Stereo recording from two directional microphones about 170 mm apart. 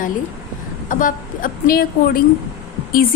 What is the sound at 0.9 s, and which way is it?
Speech, 50° left (ahead or behind).